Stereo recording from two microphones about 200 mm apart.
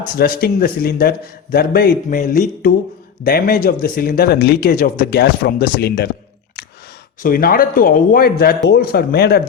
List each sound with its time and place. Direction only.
0.2 s speech: 50° left (ahead or behind)
7.2 s speech: 45° left (ahead or behind)